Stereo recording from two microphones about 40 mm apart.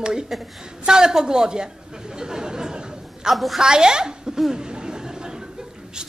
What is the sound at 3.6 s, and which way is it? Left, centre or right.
Speech, centre.